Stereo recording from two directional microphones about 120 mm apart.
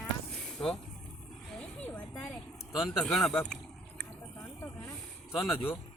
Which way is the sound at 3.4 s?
5° left (ahead or behind).